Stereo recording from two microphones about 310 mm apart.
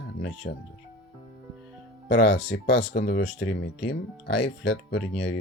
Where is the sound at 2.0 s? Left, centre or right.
Left.